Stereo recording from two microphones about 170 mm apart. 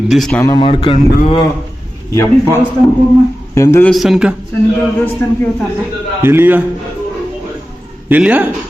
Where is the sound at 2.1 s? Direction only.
15° left (ahead or behind).